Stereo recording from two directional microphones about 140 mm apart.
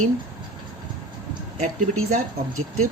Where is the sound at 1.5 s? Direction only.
60° right (ahead or behind).